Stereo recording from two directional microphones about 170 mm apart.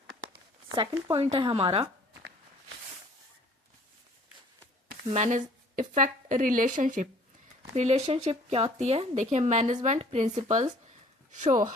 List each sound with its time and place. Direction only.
0.8 s speech: 30° right (ahead or behind)
5.1 s speech: 45° right (ahead or behind)
7.7 s speech: 40° right (ahead or behind)